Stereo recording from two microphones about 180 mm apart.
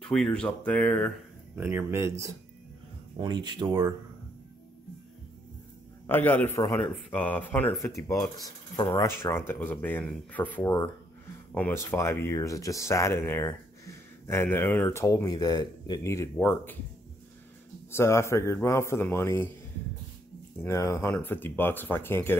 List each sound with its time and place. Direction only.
0.1 s speech: 5° left (ahead or behind)
1.5 s speech: 10° right (ahead or behind)
6.0 s speech: 10° left (ahead or behind)
17.9 s speech: 15° left (ahead or behind)
20.5 s speech: 15° left (ahead or behind)